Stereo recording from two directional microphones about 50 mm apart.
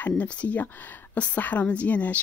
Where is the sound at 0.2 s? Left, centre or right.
Left.